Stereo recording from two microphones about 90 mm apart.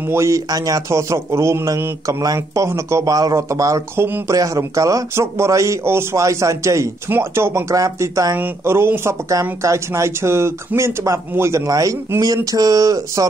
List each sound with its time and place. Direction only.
0.0 s speech: 30° right (ahead or behind)
0.5 s a man's voice: 45° right (ahead or behind); by 4.2 s 25° right (ahead or behind)
4.3 s a man's voice: 40° right (ahead or behind)
8.4 s speech: 25° right (ahead or behind)
9.3 s a man's voice: 35° right (ahead or behind)